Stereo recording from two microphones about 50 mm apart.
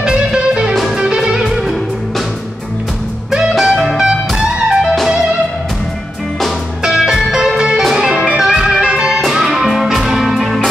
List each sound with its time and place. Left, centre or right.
0.0 s music: centre
1.5 s music: centre
3.3 s music: centre
6.8 s music: centre